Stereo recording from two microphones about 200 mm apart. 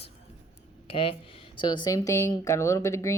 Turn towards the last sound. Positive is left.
turn(degrees=15)  # may be behind; listen again after turning